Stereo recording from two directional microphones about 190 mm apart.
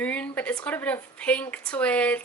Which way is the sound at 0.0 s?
10° left (ahead or behind).